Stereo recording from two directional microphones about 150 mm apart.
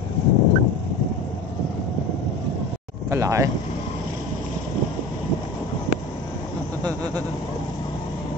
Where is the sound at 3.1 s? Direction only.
20° right (ahead or behind).